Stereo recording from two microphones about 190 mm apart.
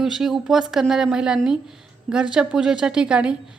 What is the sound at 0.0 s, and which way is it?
A woman's voice, centre (ahead or behind).